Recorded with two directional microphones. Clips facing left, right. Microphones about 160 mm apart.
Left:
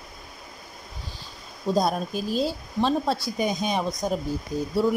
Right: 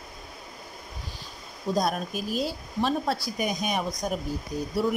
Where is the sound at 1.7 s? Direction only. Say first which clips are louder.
Left 3 dB; 30° left (ahead or behind).